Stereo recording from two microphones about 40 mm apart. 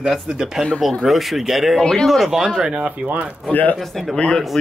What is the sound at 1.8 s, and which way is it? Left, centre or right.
Speech, centre.